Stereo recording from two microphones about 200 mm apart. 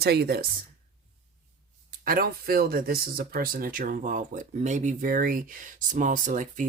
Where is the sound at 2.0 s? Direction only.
50° right (ahead or behind).